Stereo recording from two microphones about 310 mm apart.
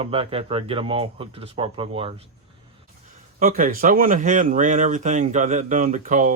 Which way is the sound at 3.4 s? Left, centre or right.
Right.